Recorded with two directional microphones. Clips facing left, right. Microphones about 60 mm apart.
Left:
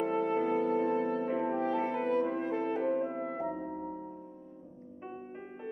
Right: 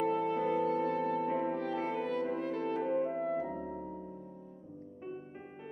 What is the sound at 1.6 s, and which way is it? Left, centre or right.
French horn, left.